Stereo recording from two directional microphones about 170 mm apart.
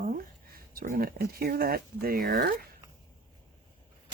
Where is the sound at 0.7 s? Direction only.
60° right (ahead or behind).